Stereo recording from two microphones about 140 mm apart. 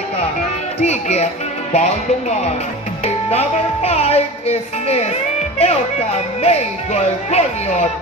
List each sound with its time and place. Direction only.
0.7 s music: 50° left (ahead or behind)